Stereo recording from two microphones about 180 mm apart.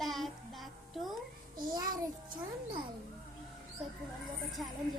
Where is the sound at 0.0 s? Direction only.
Centre (ahead or behind).